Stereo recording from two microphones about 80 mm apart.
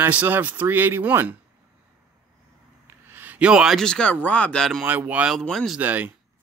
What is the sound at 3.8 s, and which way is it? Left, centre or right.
Speech, centre.